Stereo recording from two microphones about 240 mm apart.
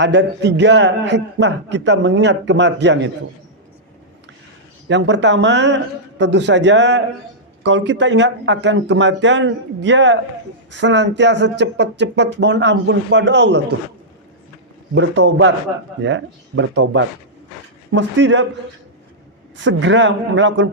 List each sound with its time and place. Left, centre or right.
0.0 s speech: right
4.9 s speech: right
14.9 s speech: right
19.5 s speech: right